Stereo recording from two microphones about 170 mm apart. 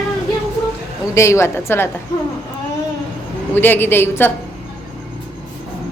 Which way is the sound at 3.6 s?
10° left (ahead or behind).